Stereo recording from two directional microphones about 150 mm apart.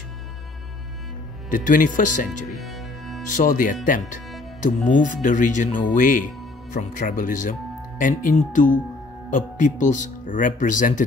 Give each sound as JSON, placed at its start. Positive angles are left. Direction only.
{"t": 1.5, "sound": "speech", "side_deg": 65}
{"t": 2.6, "sound": "cello", "side_deg": 0}
{"t": 3.3, "sound": "speech", "side_deg": 60}